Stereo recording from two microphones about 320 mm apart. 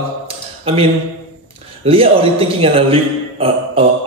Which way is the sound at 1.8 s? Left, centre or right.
Centre.